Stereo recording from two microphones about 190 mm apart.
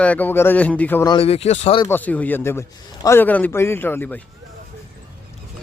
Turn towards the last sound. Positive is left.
turn(degrees=10)  # may be behind; listen again after turning